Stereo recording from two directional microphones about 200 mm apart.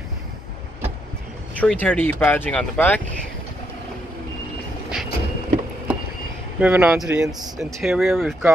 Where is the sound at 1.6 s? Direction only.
10° left (ahead or behind).